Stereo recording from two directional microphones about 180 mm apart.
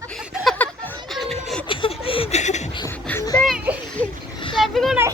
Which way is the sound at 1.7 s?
30° left (ahead or behind).